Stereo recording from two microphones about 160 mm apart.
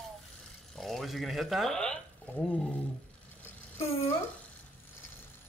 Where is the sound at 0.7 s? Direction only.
Centre (ahead or behind).